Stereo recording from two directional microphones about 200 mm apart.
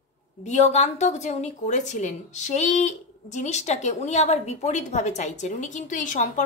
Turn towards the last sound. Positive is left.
turn(degrees=40)  # may be behind; listen again after turning